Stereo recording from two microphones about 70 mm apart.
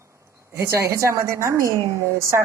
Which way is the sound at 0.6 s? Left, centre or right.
Right.